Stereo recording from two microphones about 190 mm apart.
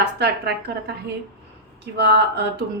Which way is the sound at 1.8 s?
65° right (ahead or behind).